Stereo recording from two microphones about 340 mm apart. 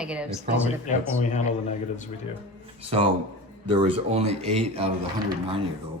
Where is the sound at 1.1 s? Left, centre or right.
Left.